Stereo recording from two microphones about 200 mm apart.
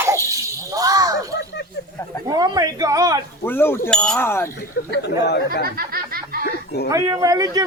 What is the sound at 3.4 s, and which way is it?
A man's voice, 10° left (ahead or behind).